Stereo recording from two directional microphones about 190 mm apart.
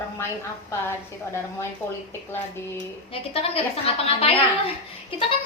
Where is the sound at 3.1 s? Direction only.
30° left (ahead or behind).